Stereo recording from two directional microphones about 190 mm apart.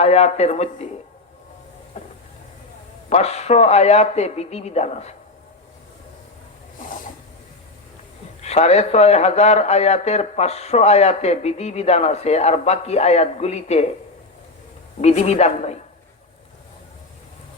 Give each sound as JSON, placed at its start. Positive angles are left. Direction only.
{"t": 0.0, "sound": "speech", "side_deg": 35}
{"t": 2.0, "sound": "vehicle", "side_deg": 35}
{"t": 3.1, "sound": "speech", "side_deg": 35}
{"t": 8.4, "sound": "speech", "side_deg": 35}
{"t": 15.0, "sound": "speech", "side_deg": 35}